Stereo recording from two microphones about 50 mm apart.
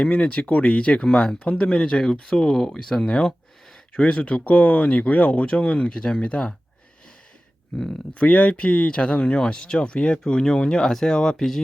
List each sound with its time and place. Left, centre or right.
0.0 s speech: left
3.0 s speech: left
8.1 s speech: left; by 11.6 s centre